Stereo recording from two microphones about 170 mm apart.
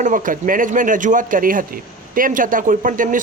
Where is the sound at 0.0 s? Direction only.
50° right (ahead or behind).